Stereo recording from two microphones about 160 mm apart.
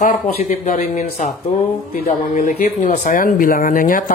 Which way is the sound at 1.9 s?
60° left (ahead or behind).